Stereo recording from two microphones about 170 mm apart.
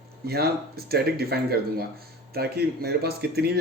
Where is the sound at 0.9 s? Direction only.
65° right (ahead or behind).